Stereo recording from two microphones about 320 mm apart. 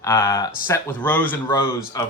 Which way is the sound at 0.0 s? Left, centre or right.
Centre.